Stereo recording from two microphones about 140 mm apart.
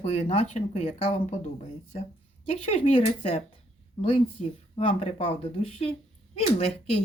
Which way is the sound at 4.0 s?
45° left (ahead or behind).